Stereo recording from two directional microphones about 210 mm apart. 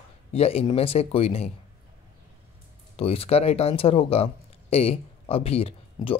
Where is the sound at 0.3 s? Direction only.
30° left (ahead or behind).